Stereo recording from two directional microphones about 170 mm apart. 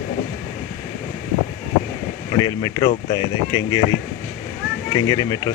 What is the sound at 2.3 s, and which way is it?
Speech, 20° left (ahead or behind).